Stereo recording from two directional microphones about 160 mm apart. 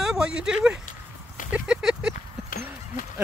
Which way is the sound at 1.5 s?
5° right (ahead or behind).